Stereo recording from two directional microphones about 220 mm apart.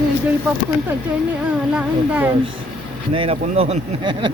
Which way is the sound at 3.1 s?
25° right (ahead or behind).